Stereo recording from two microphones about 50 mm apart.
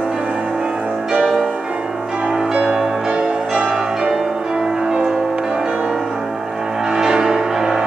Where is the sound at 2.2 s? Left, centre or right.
Centre.